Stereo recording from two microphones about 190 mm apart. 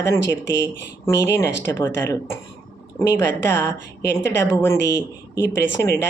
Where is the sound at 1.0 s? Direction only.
15° left (ahead or behind).